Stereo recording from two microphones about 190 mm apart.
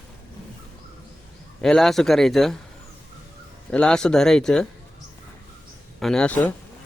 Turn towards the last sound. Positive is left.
turn(degrees=5)  # may be behind; listen again after turning